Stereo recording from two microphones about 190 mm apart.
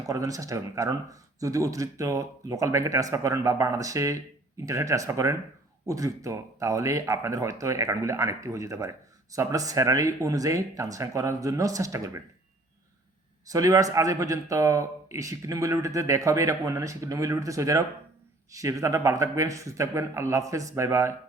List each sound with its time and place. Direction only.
0.0 s speech: 15° right (ahead or behind)
13.5 s speech: 15° right (ahead or behind)